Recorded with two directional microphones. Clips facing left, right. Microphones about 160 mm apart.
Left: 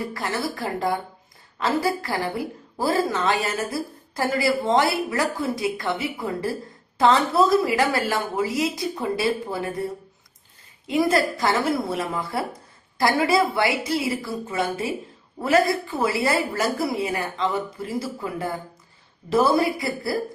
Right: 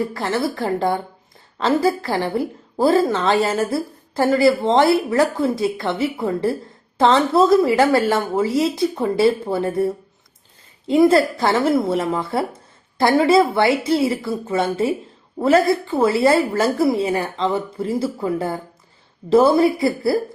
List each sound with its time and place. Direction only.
0.4 s a woman's voice: 25° right (ahead or behind)
7.3 s a woman's voice: 25° right (ahead or behind)
10.8 s a woman's voice: 30° right (ahead or behind)